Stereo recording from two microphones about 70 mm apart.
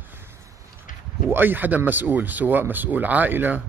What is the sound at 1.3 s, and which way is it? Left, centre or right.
A man's voice, right.